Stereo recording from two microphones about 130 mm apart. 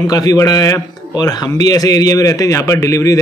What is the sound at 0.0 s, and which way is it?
A man's voice, 30° left (ahead or behind).